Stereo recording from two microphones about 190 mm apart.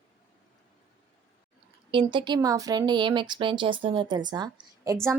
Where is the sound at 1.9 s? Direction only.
25° right (ahead or behind).